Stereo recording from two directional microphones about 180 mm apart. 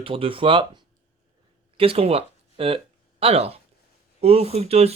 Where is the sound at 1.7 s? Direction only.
30° right (ahead or behind).